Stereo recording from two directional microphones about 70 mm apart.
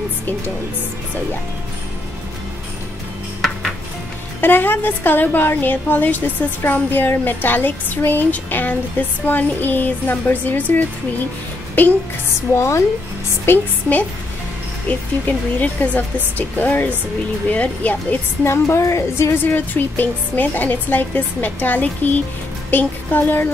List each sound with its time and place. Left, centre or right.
4.4 s a woman's voice: left
11.8 s a woman's voice: left
12.5 s speech: left
13.5 s a woman's voice: left
18.4 s speech: left
19.4 s a woman's voice: left